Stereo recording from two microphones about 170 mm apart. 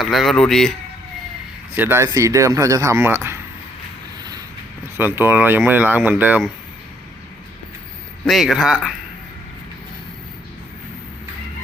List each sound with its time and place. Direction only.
0.0 s speech: centre (ahead or behind)
1.7 s speech: 10° right (ahead or behind)
4.2 s vehicle: 25° right (ahead or behind)
4.9 s speech: 15° right (ahead or behind)
8.3 s speech: centre (ahead or behind)